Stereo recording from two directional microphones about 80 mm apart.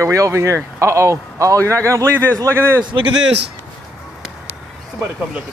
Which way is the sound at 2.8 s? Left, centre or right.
Right.